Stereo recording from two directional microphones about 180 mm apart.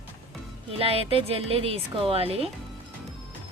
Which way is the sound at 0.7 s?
30° right (ahead or behind).